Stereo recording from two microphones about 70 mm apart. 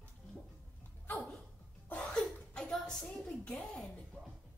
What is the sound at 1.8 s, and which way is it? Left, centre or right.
Cough, left.